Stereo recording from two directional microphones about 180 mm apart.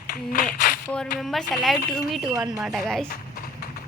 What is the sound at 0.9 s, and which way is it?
Speech, centre (ahead or behind).